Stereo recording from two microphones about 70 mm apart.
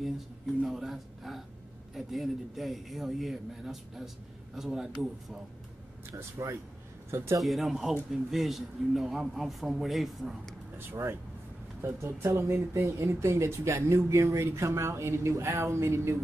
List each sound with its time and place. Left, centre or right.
0.6 s a man's voice: centre
6.1 s a man's voice: right
7.4 s a man's voice: centre
11.8 s speech: right